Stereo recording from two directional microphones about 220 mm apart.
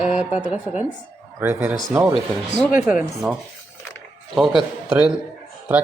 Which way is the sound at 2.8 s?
Centre (ahead or behind).